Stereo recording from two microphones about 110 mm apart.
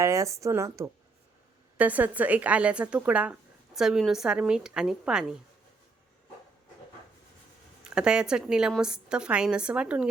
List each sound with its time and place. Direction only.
0.0 s speech: 30° right (ahead or behind)
1.8 s a woman's voice: 15° right (ahead or behind)
7.9 s a woman's voice: 10° right (ahead or behind)